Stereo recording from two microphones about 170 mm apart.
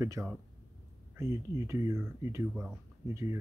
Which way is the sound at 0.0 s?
15° right (ahead or behind).